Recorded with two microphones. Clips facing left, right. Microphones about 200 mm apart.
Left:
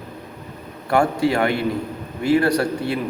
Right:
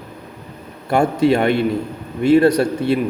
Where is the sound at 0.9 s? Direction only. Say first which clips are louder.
Right 3 dB; 25° right (ahead or behind).